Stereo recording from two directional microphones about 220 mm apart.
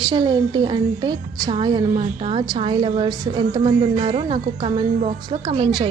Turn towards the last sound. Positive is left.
turn(degrees=-25)  # may be behind; listen again after turning